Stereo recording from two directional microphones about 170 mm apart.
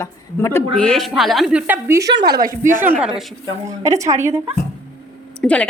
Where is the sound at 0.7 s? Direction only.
5° left (ahead or behind); by 2.1 s 15° right (ahead or behind).